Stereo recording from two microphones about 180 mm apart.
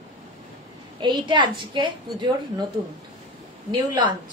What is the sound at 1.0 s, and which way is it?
A woman's voice, 25° right (ahead or behind).